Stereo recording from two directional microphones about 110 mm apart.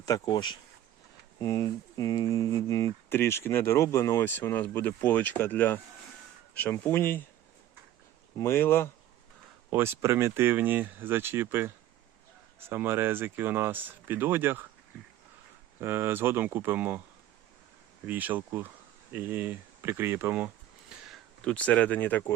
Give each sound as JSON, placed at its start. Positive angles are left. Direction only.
{"t": 0.0, "sound": "speech", "side_deg": 40}
{"t": 8.4, "sound": "speech", "side_deg": 20}
{"t": 9.6, "sound": "speech", "side_deg": -20}
{"t": 15.8, "sound": "speech", "side_deg": -20}
{"t": 18.0, "sound": "speech", "side_deg": -15}
{"t": 20.9, "sound": "a sound", "side_deg": -5}
{"t": 21.4, "sound": "speech", "side_deg": 10}